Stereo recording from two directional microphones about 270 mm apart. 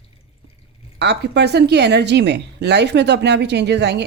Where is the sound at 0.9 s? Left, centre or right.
Right.